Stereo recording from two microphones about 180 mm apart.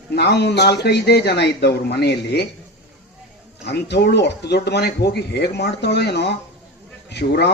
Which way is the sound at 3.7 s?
70° left (ahead or behind).